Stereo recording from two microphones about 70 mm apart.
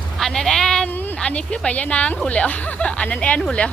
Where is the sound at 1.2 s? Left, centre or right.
Centre.